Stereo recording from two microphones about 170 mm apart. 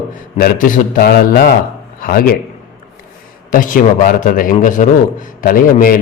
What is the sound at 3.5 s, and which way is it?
A man's voice, 55° left (ahead or behind).